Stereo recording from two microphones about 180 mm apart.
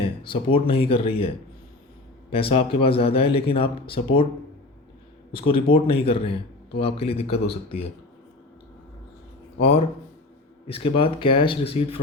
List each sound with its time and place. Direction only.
0.0 s speech: 30° left (ahead or behind)
2.3 s speech: 30° left (ahead or behind)
5.3 s speech: 30° left (ahead or behind)
9.6 s speech: 35° left (ahead or behind)